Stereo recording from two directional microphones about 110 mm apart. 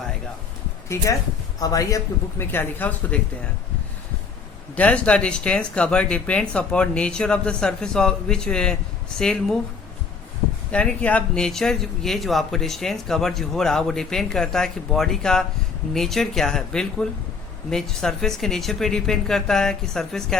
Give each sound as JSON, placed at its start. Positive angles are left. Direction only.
{"t": 0.9, "sound": "speech", "side_deg": 25}
{"t": 2.4, "sound": "speech", "side_deg": 20}
{"t": 4.7, "sound": "speech", "side_deg": 10}
{"t": 10.7, "sound": "speech", "side_deg": 10}